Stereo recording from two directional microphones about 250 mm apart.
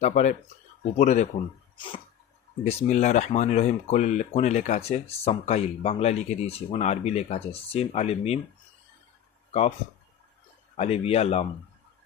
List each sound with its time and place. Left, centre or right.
0.0 s speech: left
2.6 s speech: left
9.5 s speech: left
10.8 s speech: left